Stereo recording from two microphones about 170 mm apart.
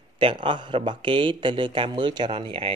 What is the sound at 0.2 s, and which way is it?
Speech, 30° right (ahead or behind).